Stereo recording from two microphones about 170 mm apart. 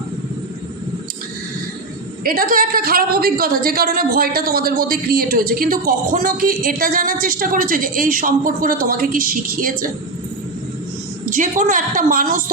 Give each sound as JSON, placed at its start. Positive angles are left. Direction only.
{"t": 2.2, "sound": "a woman's voice", "side_deg": -55}
{"t": 11.3, "sound": "a woman's voice", "side_deg": -50}